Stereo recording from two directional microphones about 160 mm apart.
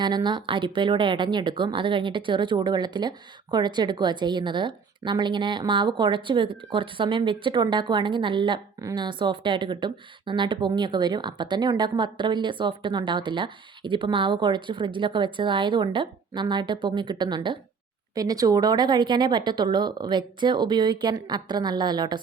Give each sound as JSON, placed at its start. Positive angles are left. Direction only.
{"t": 0.0, "sound": "speech", "side_deg": -30}